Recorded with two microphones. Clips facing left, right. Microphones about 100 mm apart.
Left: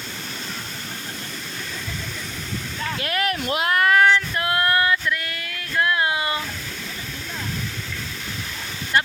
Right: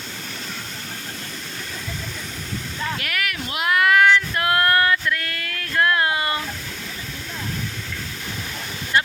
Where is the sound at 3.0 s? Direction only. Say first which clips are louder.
Left 4 dB; 30° left (ahead or behind).